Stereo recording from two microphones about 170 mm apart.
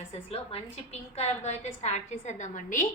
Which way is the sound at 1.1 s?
40° left (ahead or behind).